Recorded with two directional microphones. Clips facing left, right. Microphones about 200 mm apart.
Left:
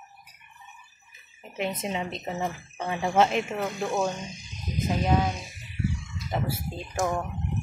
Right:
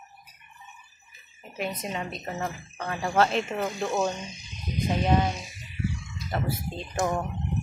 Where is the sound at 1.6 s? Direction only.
25° left (ahead or behind).